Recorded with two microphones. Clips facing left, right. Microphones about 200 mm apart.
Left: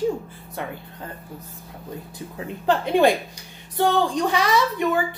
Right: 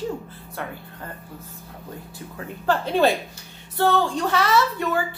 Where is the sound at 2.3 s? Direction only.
15° left (ahead or behind).